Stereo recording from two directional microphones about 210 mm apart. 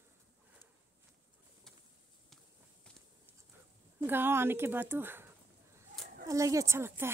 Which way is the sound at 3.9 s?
10° right (ahead or behind).